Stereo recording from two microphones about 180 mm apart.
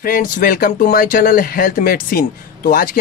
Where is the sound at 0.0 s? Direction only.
50° left (ahead or behind).